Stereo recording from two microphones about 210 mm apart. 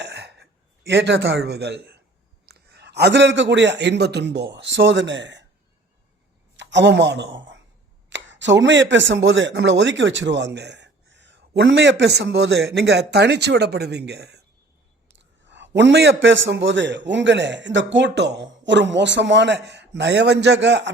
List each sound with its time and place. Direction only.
0.0 s gasp: 55° right (ahead or behind)
0.9 s a man's voice: 55° right (ahead or behind)
6.6 s a woman's voice: 55° right (ahead or behind)